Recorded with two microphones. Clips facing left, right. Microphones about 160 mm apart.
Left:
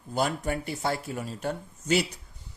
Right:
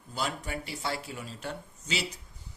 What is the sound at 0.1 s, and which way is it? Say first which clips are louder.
Speech: left 7 dB; 50° left (ahead or behind).